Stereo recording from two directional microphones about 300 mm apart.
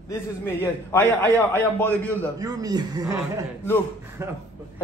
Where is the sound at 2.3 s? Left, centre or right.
Centre.